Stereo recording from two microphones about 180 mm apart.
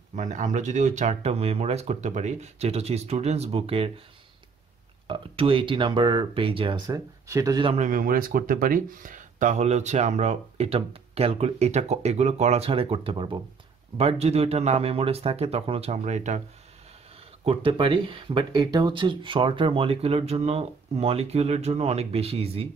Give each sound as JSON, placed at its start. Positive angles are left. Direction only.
{"t": 0.1, "sound": "speech", "side_deg": -45}
{"t": 5.0, "sound": "speech", "side_deg": -30}
{"t": 6.9, "sound": "speech", "side_deg": -15}
{"t": 7.6, "sound": "speech", "side_deg": -40}
{"t": 17.5, "sound": "speech", "side_deg": -30}